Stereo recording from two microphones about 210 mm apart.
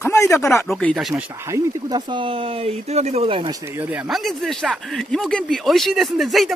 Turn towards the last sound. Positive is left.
turn(degrees=0)  # may be behind; listen again after turning